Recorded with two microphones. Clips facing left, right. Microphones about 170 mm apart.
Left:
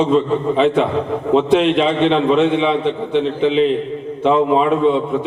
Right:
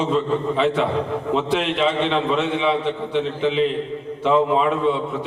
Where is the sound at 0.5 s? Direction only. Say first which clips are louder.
Left 6 dB; 20° left (ahead or behind).